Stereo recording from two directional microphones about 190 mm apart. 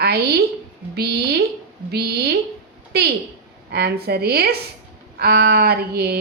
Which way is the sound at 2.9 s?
55° right (ahead or behind).